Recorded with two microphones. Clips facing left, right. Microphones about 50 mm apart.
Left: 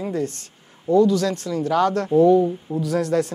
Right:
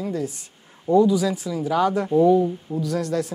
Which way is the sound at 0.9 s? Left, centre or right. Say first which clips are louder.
Left 1 dB; centre.